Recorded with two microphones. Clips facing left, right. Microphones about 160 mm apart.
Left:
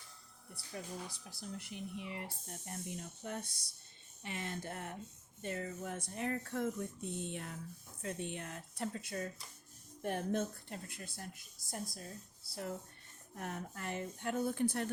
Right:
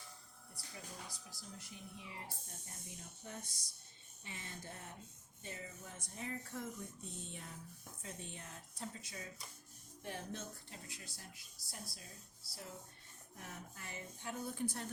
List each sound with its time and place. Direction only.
1.3 s speech: 65° left (ahead or behind)
5.4 s a woman's voice: 60° left (ahead or behind)